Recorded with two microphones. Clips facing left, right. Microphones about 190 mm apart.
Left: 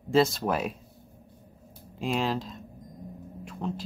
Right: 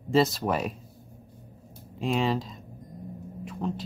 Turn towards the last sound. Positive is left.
turn(degrees=0)  # may be behind; listen again after turning